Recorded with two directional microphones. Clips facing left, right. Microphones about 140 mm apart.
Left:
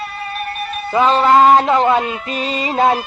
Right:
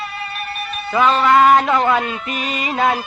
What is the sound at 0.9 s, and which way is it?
Music, 30° left (ahead or behind).